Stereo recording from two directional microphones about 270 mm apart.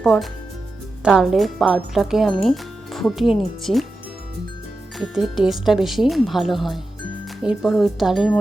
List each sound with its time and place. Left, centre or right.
0.0 s speech: centre
4.9 s speech: centre